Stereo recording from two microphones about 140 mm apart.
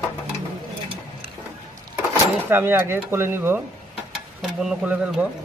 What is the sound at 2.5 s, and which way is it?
Speech, 15° right (ahead or behind).